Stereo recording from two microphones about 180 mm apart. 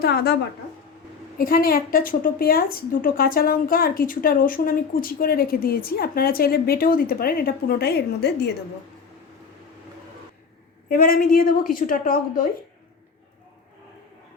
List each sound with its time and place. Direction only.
0.0 s a woman's voice: 60° left (ahead or behind)
1.4 s a woman's voice: 55° left (ahead or behind)
10.8 s a woman's voice: 55° left (ahead or behind)